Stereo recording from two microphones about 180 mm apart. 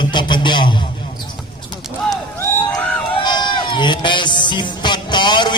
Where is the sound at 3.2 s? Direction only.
25° left (ahead or behind).